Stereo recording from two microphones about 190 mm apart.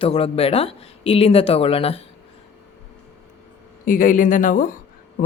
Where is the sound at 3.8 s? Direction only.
45° left (ahead or behind).